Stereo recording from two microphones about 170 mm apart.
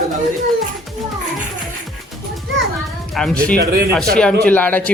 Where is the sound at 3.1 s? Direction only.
5° left (ahead or behind).